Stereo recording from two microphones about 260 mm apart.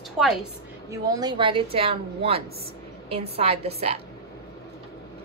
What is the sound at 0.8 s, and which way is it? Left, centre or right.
A woman's voice, centre.